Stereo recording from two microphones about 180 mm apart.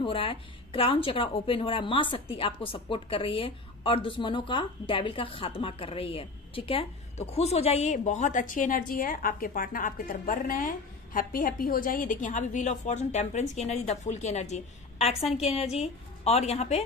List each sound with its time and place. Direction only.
0.0 s a woman's voice: 30° left (ahead or behind)